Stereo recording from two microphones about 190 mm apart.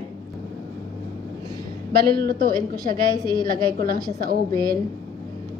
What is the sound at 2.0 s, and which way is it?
Speech, 55° right (ahead or behind).